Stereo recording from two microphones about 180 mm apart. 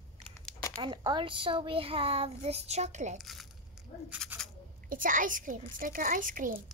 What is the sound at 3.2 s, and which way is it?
Speech, centre (ahead or behind).